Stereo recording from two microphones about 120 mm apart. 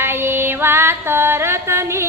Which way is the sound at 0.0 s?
20° right (ahead or behind).